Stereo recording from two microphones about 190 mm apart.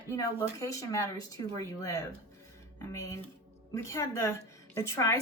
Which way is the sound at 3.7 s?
15° left (ahead or behind).